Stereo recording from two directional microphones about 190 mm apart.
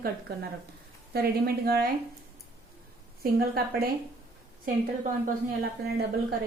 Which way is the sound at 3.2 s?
50° right (ahead or behind).